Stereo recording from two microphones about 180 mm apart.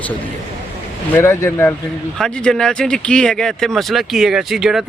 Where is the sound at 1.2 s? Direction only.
15° left (ahead or behind).